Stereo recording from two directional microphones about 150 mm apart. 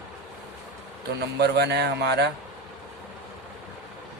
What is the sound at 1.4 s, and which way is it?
Speech, 90° right.